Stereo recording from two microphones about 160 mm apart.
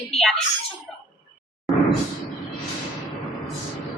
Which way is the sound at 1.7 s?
Centre (ahead or behind).